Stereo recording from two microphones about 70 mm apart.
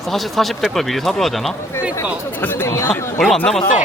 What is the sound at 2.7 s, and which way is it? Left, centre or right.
Speech, left.